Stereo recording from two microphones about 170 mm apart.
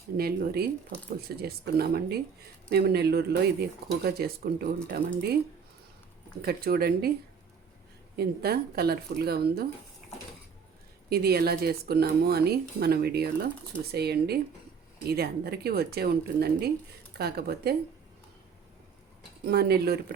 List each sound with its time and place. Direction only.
0.2 s speech: 65° right (ahead or behind)
6.4 s speech: 65° right (ahead or behind)
8.1 s speech: 65° right (ahead or behind)
11.1 s speech: 65° right (ahead or behind)
19.5 s speech: 70° right (ahead or behind)